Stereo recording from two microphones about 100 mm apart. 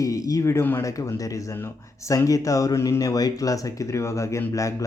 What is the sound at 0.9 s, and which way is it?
Speech, 35° left (ahead or behind).